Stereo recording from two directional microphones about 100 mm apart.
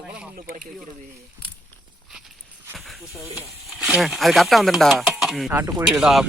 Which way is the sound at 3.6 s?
Centre (ahead or behind).